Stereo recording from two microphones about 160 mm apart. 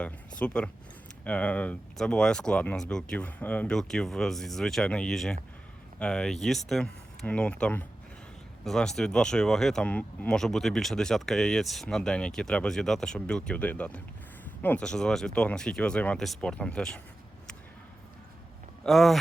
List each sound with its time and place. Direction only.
0.0 s speech: 5° left (ahead or behind)
18.8 s speech: centre (ahead or behind)